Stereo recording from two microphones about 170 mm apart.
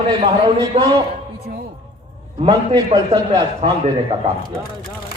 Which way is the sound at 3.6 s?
35° right (ahead or behind).